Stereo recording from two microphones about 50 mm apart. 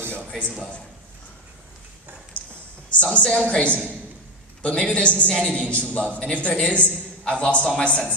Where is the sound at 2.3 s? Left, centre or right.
Left.